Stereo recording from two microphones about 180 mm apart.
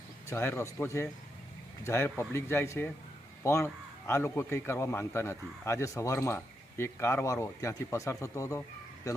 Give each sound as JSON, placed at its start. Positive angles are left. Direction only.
{"t": 0.3, "sound": "a man's voice", "side_deg": 15}